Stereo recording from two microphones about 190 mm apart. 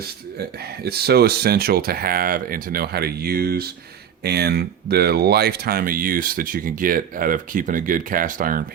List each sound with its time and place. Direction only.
0.9 s speech: 55° right (ahead or behind)